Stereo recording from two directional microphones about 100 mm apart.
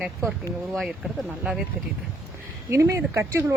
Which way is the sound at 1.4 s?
5° right (ahead or behind).